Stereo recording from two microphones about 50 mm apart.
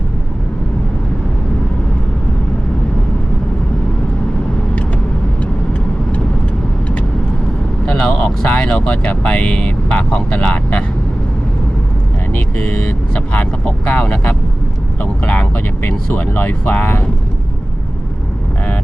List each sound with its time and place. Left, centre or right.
7.9 s vehicle: centre
8.4 s vehicle: left
8.9 s speech: left
12.3 s speech: left